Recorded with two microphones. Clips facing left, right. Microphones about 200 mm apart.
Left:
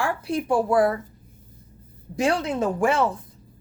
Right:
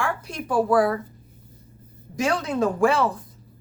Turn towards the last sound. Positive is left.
turn(degrees=20)  # may be behind; listen again after turning